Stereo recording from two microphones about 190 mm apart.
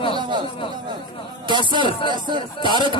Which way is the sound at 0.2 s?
25° right (ahead or behind).